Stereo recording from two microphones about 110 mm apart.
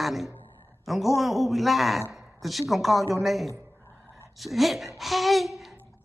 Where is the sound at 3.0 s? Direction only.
30° right (ahead or behind).